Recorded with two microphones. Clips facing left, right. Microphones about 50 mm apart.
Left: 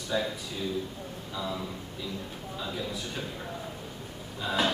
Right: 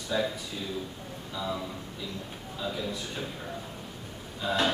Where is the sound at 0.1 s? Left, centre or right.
Centre.